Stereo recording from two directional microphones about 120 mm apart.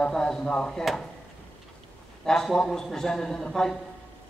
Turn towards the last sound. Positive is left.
turn(degrees=5)  # may be behind; listen again after turning